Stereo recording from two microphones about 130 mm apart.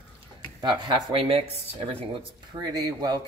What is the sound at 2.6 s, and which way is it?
Speech, 30° right (ahead or behind).